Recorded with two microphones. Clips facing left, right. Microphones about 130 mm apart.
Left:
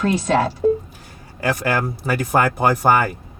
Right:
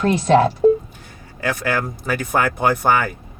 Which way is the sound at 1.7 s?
10° left (ahead or behind).